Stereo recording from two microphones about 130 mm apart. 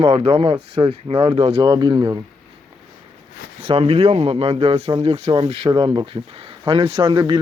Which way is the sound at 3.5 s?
45° right (ahead or behind).